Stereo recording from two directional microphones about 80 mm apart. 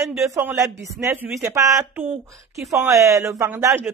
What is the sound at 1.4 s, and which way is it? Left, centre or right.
Speech, right.